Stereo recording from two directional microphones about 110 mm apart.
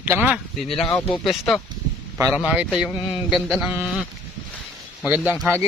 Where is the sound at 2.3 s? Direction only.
10° right (ahead or behind).